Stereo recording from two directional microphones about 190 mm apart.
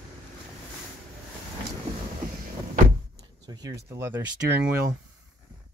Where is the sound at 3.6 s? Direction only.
15° right (ahead or behind).